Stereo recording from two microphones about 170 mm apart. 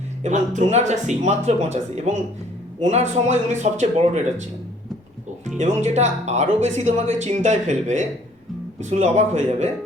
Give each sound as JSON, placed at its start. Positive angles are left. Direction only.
{"t": 0.2, "sound": "speech", "side_deg": -45}
{"t": 5.5, "sound": "speech", "side_deg": -45}